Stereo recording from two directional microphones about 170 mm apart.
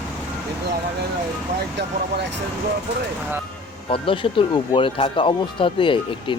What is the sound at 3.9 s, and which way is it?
Speech, 30° left (ahead or behind).